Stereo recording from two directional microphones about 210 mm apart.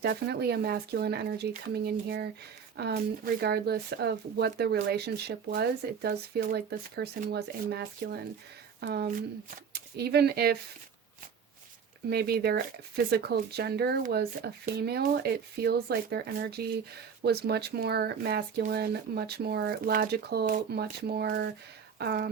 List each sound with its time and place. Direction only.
0.0 s speech: 50° right (ahead or behind)
12.1 s speech: 50° right (ahead or behind)